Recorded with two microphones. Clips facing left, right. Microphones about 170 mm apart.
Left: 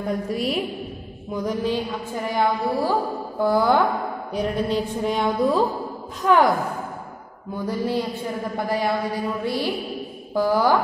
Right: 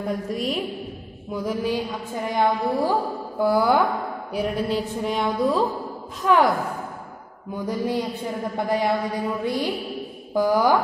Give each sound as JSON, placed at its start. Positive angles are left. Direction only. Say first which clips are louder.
{"t": 0.0, "sound": "a woman's voice", "louder": "left 1 dB", "side_deg": 0}
{"t": 2.2, "sound": "a woman's voice", "louder": "right 1 dB", "side_deg": -20}
{"t": 7.5, "sound": "a woman's voice", "louder": "left 1 dB", "side_deg": -15}